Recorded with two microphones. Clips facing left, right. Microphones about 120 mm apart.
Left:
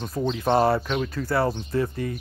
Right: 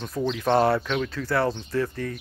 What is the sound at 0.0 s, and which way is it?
Speech, 15° left (ahead or behind).